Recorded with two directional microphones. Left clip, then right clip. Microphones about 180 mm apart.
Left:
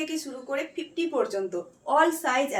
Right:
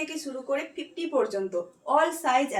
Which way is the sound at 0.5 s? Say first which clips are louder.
Left 1 dB; 20° left (ahead or behind).